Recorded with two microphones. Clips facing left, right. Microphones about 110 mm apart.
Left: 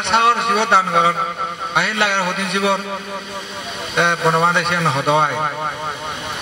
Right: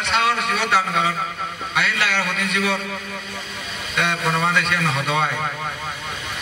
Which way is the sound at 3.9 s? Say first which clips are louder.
Left 6 dB; 25° left (ahead or behind).